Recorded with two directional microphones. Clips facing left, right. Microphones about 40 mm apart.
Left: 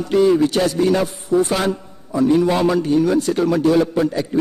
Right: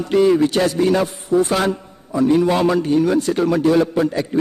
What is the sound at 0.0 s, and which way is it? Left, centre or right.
A man's voice, right.